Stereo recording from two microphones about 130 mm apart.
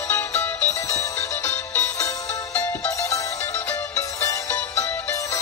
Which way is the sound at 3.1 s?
25° left (ahead or behind).